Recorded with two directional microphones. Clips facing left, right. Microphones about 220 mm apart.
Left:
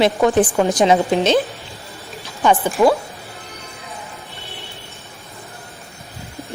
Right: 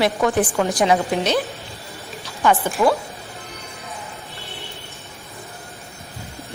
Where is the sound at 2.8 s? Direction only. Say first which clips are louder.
Left 4 dB; 15° left (ahead or behind).